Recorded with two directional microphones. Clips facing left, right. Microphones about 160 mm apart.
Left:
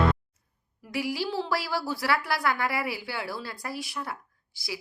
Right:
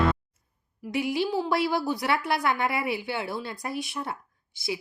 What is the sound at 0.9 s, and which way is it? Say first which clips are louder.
A woman's voice: right 3 dB; 20° right (ahead or behind).